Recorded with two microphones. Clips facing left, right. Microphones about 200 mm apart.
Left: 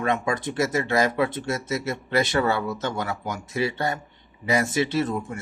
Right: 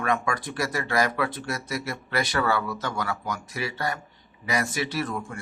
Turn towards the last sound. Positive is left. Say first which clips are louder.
# left 5 dB
turn(degrees=25)  # may be behind; listen again after turning